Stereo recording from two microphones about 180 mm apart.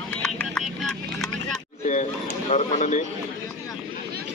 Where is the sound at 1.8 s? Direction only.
40° left (ahead or behind).